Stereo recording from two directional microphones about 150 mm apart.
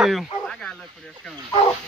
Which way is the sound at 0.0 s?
Centre (ahead or behind).